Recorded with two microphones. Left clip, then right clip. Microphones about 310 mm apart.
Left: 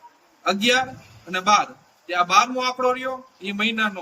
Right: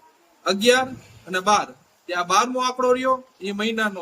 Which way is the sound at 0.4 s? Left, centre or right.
Right.